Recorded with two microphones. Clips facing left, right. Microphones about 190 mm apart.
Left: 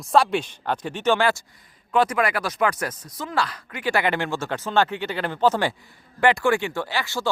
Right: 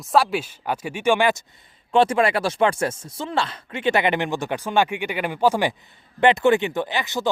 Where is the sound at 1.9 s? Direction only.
30° right (ahead or behind).